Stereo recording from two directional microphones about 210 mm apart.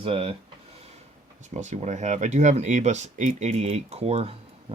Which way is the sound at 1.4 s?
35° right (ahead or behind).